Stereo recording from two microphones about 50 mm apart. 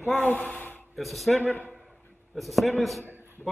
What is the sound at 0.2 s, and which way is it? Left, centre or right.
Speech, left.